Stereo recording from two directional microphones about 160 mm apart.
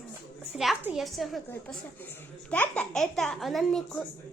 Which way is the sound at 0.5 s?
Centre (ahead or behind).